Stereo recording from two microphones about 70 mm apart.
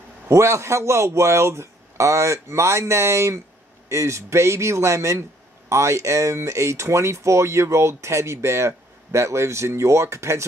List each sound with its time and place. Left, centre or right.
0.3 s speech: right